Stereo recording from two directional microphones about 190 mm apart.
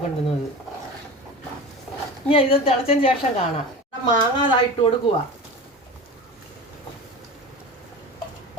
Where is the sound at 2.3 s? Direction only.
30° left (ahead or behind).